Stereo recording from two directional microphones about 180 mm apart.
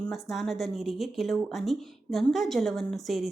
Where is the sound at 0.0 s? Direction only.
Centre (ahead or behind).